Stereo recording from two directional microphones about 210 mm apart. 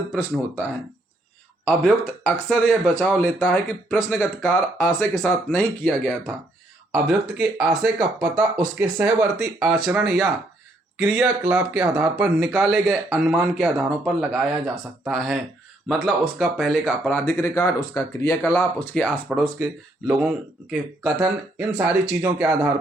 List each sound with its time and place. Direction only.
0.1 s speech: 10° right (ahead or behind)
1.6 s speech: centre (ahead or behind)
6.9 s speech: 5° right (ahead or behind)